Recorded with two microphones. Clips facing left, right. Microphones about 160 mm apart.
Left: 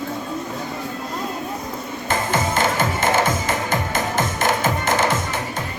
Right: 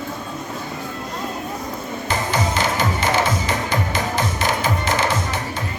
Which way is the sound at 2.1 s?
50° left (ahead or behind).